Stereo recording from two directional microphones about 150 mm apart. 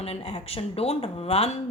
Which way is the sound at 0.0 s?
45° left (ahead or behind).